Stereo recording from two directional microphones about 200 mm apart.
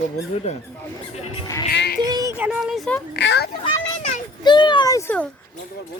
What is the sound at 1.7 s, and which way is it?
Speech, 55° left (ahead or behind).